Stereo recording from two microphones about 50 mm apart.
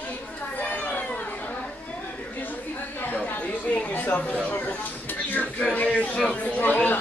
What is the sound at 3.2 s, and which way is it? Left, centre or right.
Chatter, left.